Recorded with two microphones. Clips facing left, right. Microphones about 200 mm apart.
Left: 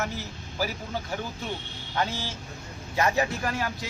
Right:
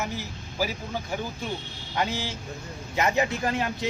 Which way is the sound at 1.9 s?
15° right (ahead or behind).